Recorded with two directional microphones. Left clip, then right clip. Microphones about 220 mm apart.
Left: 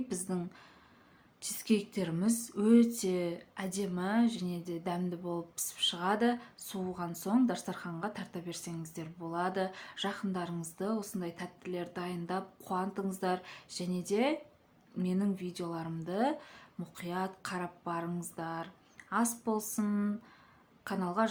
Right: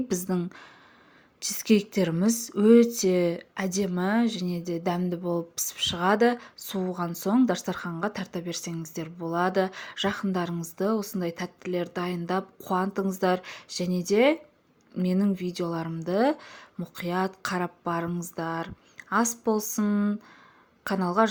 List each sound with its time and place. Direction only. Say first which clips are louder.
0.1 s speech: right 9 dB; 25° right (ahead or behind)